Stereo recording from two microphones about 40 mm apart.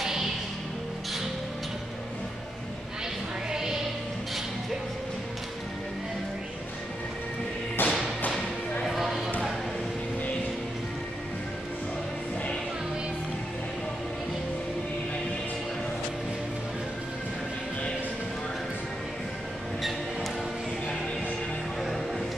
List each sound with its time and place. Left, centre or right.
3.5 s music: centre
7.8 s music: left
8.8 s a sound: centre